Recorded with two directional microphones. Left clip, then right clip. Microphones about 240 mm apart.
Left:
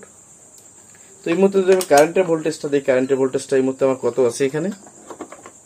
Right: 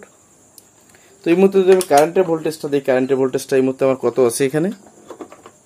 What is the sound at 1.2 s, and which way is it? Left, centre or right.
Speech, right.